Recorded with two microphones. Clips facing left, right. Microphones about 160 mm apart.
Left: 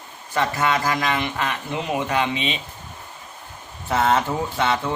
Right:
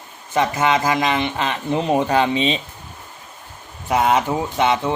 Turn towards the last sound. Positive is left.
turn(degrees=-20)  # may be behind; listen again after turning